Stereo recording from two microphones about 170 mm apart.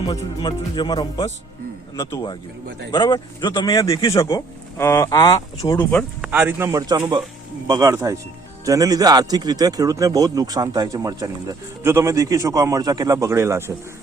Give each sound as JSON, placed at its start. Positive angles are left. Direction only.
{"t": 0.1, "sound": "speech", "side_deg": 25}
{"t": 6.2, "sound": "a man's voice", "side_deg": -10}